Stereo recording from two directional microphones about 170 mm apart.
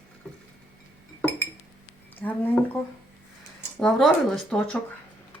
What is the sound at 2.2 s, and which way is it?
Speech, 5° left (ahead or behind).